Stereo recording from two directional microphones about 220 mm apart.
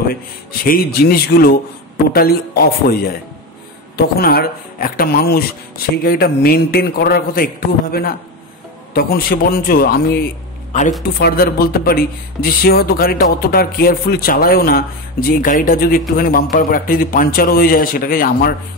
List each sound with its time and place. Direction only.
0.1 s speech: 40° left (ahead or behind)